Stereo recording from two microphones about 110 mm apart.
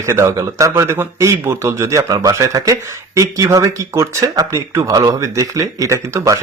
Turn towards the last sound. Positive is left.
turn(degrees=-30)  # may be behind; listen again after turning